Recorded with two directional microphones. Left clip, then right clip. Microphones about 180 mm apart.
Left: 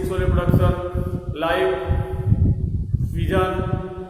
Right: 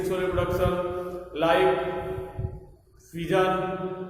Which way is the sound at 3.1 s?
Centre (ahead or behind).